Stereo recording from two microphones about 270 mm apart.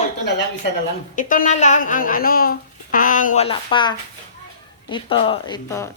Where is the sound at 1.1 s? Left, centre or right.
Left; by 5.9 s centre.